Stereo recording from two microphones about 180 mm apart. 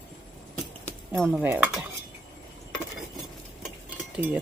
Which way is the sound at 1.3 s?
10° right (ahead or behind).